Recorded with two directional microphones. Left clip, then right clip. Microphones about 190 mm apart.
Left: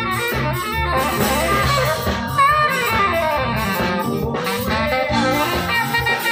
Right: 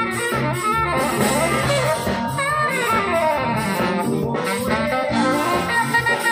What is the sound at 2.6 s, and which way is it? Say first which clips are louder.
Music: left 2 dB; 25° left (ahead or behind).